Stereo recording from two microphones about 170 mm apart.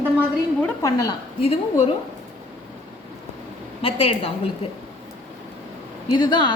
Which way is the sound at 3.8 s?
35° left (ahead or behind).